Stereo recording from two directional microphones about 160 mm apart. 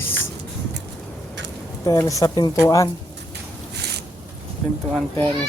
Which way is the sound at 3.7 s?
90° right.